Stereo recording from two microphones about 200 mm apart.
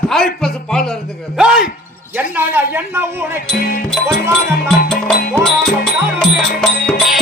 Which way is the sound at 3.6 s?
45° left (ahead or behind).